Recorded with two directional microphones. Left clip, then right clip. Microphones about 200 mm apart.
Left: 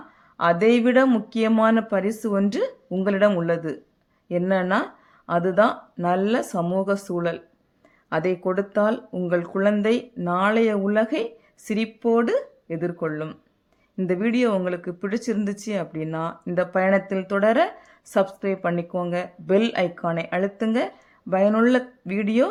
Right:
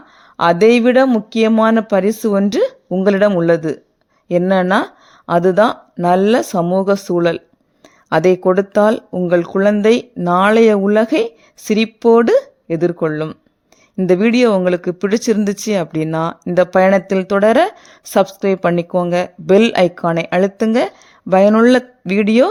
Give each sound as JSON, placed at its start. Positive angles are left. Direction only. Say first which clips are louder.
{"t": 0.3, "sound": "speech", "louder": "right 8 dB", "side_deg": -45}